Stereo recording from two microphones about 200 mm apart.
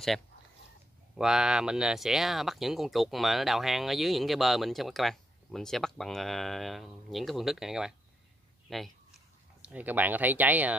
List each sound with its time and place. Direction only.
1.1 s speech: 5° right (ahead or behind)